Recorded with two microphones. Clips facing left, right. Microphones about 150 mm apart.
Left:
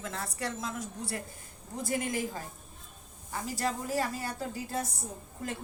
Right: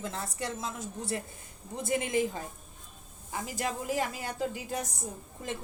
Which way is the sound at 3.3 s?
20° right (ahead or behind).